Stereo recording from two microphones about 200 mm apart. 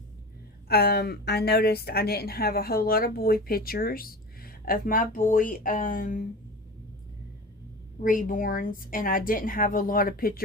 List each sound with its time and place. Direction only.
0.7 s a woman's voice: 50° left (ahead or behind)
8.0 s a woman's voice: 40° left (ahead or behind)